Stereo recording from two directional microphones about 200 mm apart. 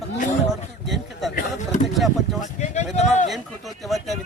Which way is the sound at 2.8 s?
35° left (ahead or behind).